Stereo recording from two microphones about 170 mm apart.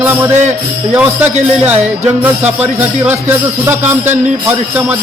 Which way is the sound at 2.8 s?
10° right (ahead or behind).